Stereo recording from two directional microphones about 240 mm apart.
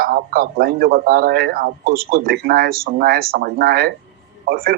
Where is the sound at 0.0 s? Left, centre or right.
Right.